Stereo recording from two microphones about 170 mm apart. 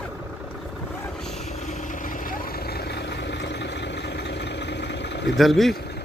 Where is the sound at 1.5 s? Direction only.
45° left (ahead or behind); by 5.4 s 90° left.